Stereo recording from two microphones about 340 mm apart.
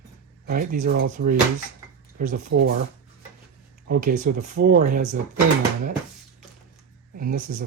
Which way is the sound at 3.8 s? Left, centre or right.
Right.